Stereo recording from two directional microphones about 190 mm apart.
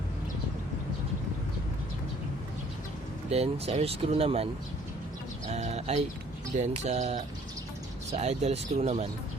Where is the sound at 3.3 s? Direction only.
35° right (ahead or behind).